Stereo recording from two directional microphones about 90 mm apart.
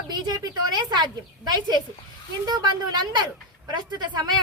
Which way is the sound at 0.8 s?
50° right (ahead or behind).